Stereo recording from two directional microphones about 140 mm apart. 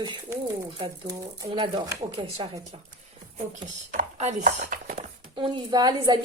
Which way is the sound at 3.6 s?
60° right (ahead or behind).